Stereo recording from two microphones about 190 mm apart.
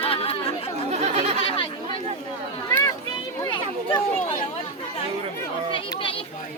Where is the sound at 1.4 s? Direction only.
25° left (ahead or behind).